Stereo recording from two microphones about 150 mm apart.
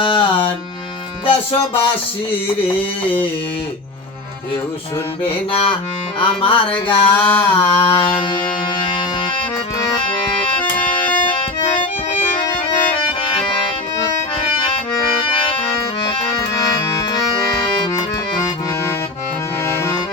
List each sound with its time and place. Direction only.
0.0 s music: 35° left (ahead or behind)
5.3 s music: 40° left (ahead or behind)
7.2 s a sound: 10° left (ahead or behind)
7.6 s music: 40° left (ahead or behind)